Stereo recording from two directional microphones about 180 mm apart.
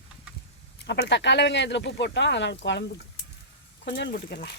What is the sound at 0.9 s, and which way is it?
Speech, 70° left (ahead or behind).